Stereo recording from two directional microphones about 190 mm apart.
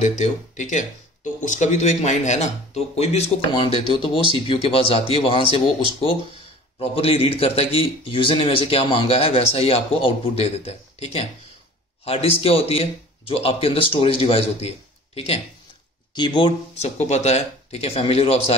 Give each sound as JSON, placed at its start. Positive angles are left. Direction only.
{"t": 0.0, "sound": "a man's voice", "side_deg": 40}
{"t": 6.8, "sound": "a man's voice", "side_deg": 30}